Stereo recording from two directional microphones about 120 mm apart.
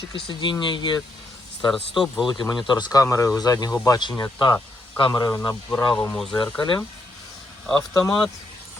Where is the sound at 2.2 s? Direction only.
35° left (ahead or behind).